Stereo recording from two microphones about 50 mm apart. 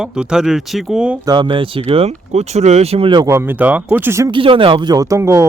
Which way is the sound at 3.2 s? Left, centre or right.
Right.